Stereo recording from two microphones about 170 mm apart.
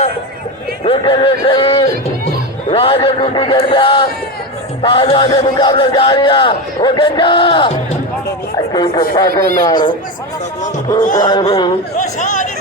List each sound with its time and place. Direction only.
0.9 s speech: 30° left (ahead or behind)
11.2 s speech: 25° left (ahead or behind)
11.9 s speech: 50° left (ahead or behind)